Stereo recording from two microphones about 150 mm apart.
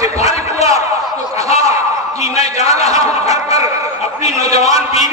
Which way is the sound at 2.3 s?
45° left (ahead or behind).